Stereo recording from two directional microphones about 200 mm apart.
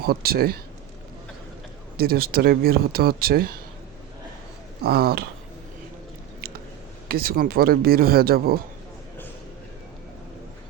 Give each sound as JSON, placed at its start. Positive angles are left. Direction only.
{"t": 0.0, "sound": "speech", "side_deg": -50}
{"t": 2.0, "sound": "speech", "side_deg": -50}
{"t": 4.8, "sound": "speech", "side_deg": -50}
{"t": 7.1, "sound": "speech", "side_deg": -50}